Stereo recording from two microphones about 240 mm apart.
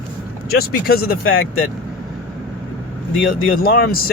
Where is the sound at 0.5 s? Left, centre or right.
Left.